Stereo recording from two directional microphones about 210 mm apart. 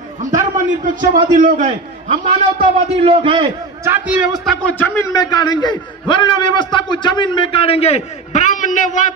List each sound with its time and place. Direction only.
0.4 s a man's voice: 35° right (ahead or behind)
2.6 s a man's voice: 25° right (ahead or behind)
3.8 s a man's voice: 10° right (ahead or behind)
4.5 s a man's voice: 10° left (ahead or behind); by 9.1 s 35° left (ahead or behind)